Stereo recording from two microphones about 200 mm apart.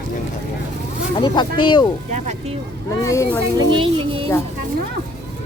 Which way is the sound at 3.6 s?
25° right (ahead or behind).